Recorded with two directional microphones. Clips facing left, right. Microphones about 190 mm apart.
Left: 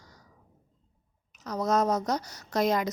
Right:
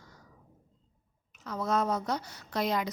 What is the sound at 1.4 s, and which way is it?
A woman's voice, 40° left (ahead or behind).